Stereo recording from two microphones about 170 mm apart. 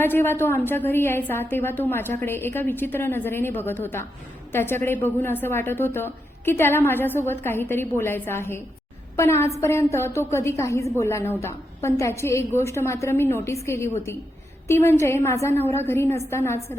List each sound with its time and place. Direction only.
0.0 s a woman's voice: 15° left (ahead or behind)